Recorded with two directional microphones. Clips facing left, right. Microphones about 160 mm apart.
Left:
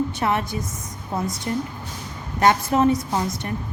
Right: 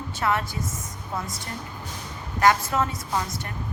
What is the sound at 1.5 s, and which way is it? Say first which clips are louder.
A woman's voice: left 9 dB; 20° left (ahead or behind).